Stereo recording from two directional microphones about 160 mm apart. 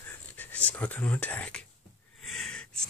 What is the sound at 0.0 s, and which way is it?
Speech, 10° left (ahead or behind).